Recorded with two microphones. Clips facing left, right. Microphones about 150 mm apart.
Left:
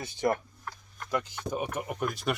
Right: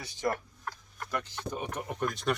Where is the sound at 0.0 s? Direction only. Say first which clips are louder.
Left 4 dB; 20° left (ahead or behind).